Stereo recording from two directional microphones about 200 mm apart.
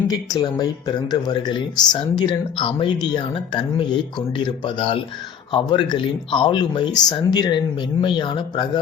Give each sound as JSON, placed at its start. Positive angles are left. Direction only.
{"t": 0.1, "sound": "speech", "side_deg": 20}